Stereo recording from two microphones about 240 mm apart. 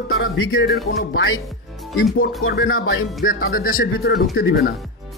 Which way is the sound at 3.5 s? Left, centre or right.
Left.